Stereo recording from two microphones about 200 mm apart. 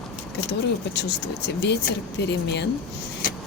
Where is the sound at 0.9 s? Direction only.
55° left (ahead or behind).